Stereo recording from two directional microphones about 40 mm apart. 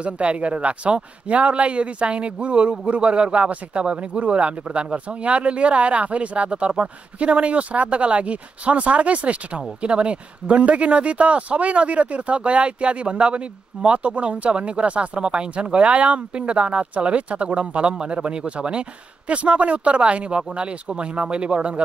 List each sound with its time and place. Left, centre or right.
0.0 s speech: right